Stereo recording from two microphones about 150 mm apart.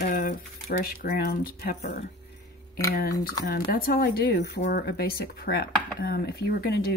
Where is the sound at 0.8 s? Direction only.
90° left.